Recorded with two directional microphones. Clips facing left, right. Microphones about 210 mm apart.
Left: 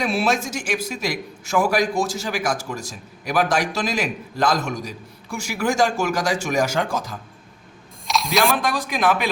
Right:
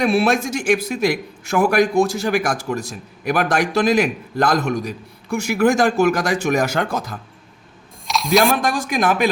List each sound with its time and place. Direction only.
0.0 s a man's voice: 55° right (ahead or behind)
8.0 s music: centre (ahead or behind)
8.6 s a man's voice: 45° right (ahead or behind)